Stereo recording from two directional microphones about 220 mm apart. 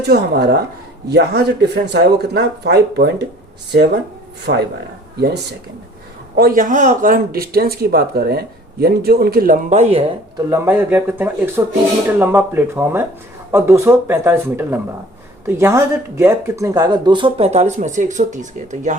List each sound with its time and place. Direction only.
0.0 s speech: 45° right (ahead or behind)
4.5 s speech: 50° right (ahead or behind)